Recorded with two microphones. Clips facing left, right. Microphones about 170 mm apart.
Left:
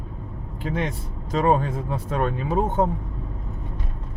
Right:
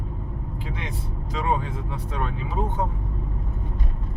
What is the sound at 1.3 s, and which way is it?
Speech, 50° left (ahead or behind).